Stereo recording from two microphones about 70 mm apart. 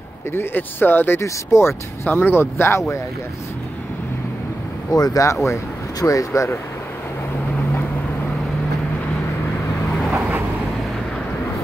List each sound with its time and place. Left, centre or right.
0.3 s speech: left
4.9 s speech: left